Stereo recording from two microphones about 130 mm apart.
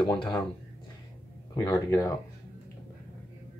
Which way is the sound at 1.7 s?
25° left (ahead or behind).